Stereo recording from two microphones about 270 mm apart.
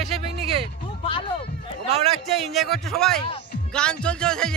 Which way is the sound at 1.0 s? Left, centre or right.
Centre.